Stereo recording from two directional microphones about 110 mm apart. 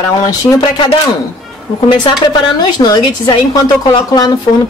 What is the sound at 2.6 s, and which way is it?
Speech, 40° left (ahead or behind).